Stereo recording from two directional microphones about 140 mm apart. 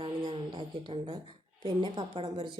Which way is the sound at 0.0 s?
35° right (ahead or behind).